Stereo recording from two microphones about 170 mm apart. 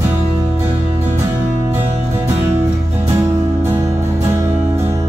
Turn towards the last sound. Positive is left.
turn(degrees=-15)  # may be behind; listen again after turning